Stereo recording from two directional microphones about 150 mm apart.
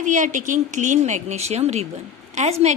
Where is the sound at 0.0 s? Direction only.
60° right (ahead or behind).